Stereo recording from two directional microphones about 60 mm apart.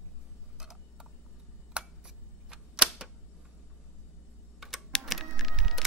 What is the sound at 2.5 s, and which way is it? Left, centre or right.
Typewriter, centre.